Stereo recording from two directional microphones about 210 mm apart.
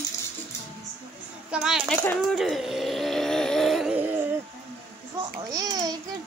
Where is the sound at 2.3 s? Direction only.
Centre (ahead or behind).